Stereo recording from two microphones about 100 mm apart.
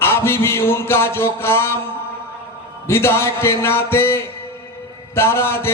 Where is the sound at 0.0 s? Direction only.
25° left (ahead or behind).